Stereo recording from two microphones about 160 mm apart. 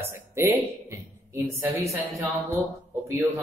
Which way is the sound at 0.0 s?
15° right (ahead or behind).